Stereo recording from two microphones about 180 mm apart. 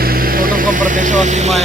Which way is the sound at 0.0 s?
55° right (ahead or behind).